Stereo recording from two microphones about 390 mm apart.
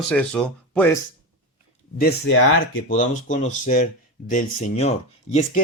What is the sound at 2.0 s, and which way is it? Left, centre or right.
Speech, left.